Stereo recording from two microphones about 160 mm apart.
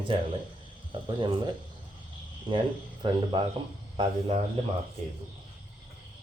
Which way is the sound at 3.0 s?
30° right (ahead or behind).